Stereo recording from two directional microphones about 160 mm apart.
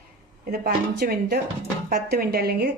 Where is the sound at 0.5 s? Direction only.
70° right (ahead or behind).